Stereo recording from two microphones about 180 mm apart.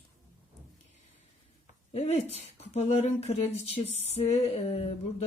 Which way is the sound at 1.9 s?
35° left (ahead or behind).